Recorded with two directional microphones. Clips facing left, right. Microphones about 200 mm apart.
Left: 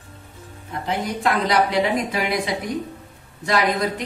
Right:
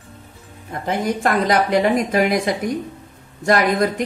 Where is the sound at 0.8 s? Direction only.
50° right (ahead or behind).